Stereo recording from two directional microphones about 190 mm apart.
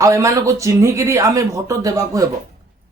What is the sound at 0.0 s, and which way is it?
Speech, 15° right (ahead or behind).